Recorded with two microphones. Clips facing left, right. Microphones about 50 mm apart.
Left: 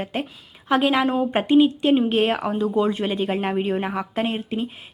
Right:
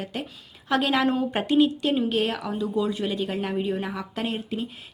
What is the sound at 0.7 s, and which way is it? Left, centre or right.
A woman's voice, centre.